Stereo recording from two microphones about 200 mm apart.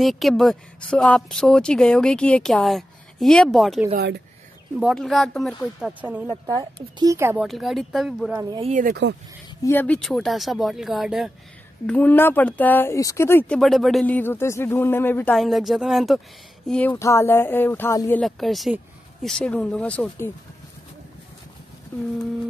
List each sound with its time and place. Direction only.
0.0 s speech: centre (ahead or behind)
3.9 s speech: 55° right (ahead or behind)
4.7 s speech: centre (ahead or behind)
6.4 s speech: 20° right (ahead or behind)
7.4 s speech: centre (ahead or behind)
8.4 s speech: 20° right (ahead or behind)
8.6 s speech: 40° right (ahead or behind)
9.6 s speech: 10° left (ahead or behind)
18.2 s speech: centre (ahead or behind)